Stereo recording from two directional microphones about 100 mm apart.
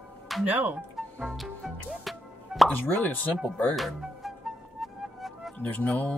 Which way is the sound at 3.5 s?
5° left (ahead or behind).